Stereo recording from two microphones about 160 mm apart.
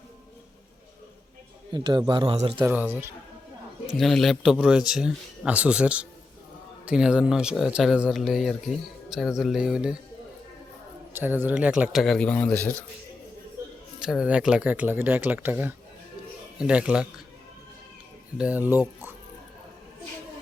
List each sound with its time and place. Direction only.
1.7 s speech: 25° right (ahead or behind)
2.6 s speech: 10° right (ahead or behind)
3.9 s a man's voice: centre (ahead or behind)
11.1 s a man's voice: 10° right (ahead or behind); by 12.7 s 10° left (ahead or behind)
14.0 s speech: 5° right (ahead or behind)
18.3 s speech: 10° right (ahead or behind)